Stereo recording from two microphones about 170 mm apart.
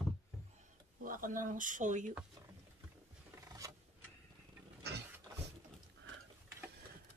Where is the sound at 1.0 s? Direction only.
55° right (ahead or behind).